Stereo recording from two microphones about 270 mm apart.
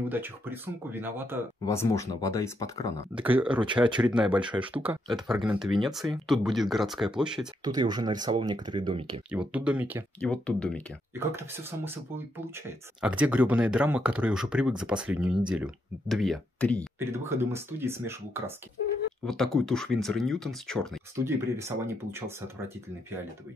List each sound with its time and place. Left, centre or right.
0.1 s speech: centre
1.7 s speech: centre
3.2 s speech: centre
7.6 s speech: centre
9.3 s speech: centre
11.1 s speech: centre
17.0 s speech: centre
19.2 s speech: centre
21.2 s speech: centre